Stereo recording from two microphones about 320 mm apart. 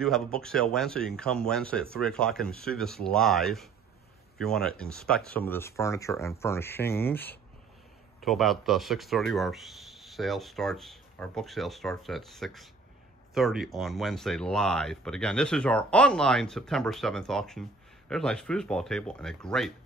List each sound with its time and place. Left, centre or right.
0.0 s speech: centre